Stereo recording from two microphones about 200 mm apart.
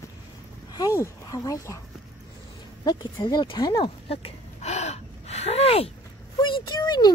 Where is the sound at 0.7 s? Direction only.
15° left (ahead or behind).